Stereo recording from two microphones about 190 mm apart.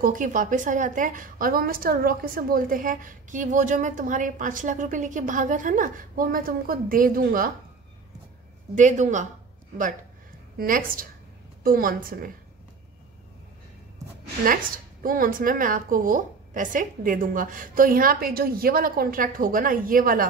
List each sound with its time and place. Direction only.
0.0 s a woman's voice: 45° right (ahead or behind)
8.7 s speech: 40° right (ahead or behind)
10.6 s a woman's voice: 45° right (ahead or behind)
14.4 s a woman's voice: 45° right (ahead or behind)